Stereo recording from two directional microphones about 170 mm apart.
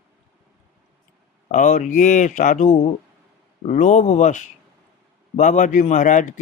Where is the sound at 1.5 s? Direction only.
45° left (ahead or behind).